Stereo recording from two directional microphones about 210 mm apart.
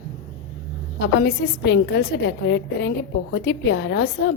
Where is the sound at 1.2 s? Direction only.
55° left (ahead or behind).